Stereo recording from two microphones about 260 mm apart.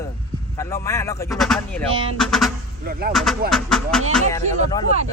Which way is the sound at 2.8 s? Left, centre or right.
Right.